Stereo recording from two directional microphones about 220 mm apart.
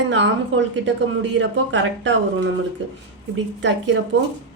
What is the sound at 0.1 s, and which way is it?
A woman's voice, 55° right (ahead or behind).